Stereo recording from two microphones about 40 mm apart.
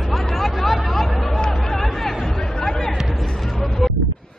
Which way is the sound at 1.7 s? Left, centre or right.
Centre.